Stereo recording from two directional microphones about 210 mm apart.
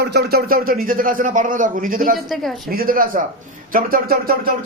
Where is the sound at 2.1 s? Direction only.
Centre (ahead or behind).